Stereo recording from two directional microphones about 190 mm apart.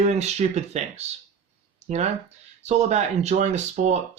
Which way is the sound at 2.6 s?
35° right (ahead or behind).